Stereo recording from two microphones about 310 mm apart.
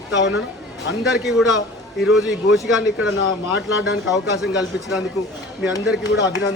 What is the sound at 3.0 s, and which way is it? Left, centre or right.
Speech, left.